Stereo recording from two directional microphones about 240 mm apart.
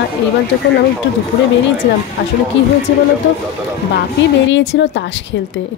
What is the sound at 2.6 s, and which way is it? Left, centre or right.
Speech, left.